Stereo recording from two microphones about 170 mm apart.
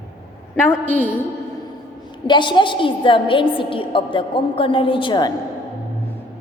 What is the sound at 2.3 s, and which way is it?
A woman's voice, 25° left (ahead or behind).